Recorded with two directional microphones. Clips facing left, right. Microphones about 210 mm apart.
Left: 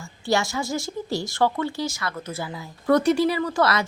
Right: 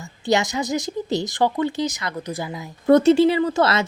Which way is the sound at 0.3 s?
20° right (ahead or behind).